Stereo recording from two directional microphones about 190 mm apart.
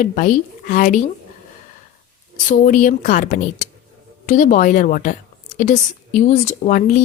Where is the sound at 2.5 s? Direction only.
45° left (ahead or behind).